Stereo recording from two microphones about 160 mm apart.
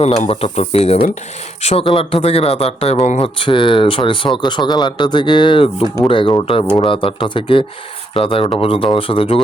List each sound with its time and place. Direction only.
0.0 s speech: 40° left (ahead or behind)